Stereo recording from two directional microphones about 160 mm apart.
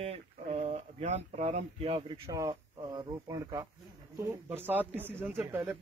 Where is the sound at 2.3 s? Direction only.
20° right (ahead or behind).